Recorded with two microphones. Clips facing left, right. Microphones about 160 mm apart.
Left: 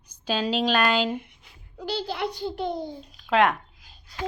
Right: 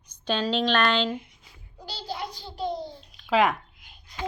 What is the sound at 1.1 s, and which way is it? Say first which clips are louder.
A child's voice: left 2 dB; 55° left (ahead or behind).